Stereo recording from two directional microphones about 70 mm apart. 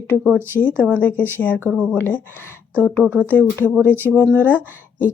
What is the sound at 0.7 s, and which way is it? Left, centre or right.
Speech, right.